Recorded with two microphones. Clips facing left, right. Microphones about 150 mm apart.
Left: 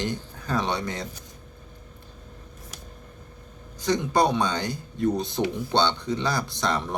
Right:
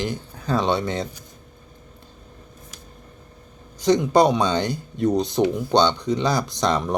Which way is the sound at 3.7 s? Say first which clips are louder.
Right 6 dB; 20° right (ahead or behind).